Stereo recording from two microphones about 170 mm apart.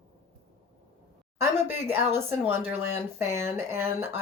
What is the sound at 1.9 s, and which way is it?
Speech, 15° right (ahead or behind).